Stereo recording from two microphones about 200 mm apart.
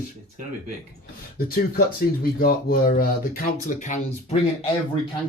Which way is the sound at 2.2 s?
50° left (ahead or behind).